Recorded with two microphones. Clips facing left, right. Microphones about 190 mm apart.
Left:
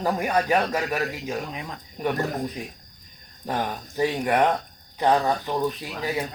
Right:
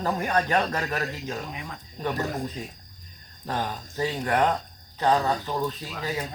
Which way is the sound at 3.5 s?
15° left (ahead or behind).